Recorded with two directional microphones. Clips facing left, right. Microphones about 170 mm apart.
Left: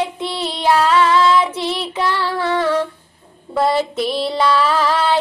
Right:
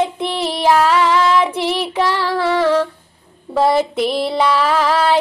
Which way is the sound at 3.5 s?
15° right (ahead or behind).